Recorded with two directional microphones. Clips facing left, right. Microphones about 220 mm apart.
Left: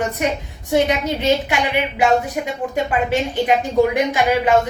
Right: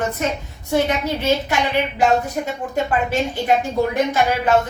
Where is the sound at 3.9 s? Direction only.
15° left (ahead or behind).